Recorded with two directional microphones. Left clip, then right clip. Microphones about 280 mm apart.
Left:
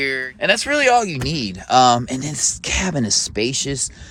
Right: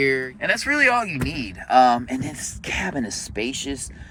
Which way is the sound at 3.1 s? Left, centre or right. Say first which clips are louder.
Left 7 dB; left.